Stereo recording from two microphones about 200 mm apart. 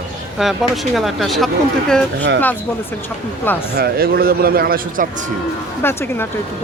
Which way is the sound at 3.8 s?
50° right (ahead or behind).